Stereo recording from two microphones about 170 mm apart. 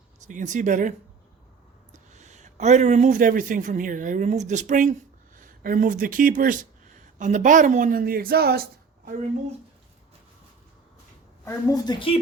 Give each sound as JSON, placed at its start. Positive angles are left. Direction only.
{"t": 0.3, "sound": "speech", "side_deg": -50}
{"t": 11.4, "sound": "a woman's voice", "side_deg": 25}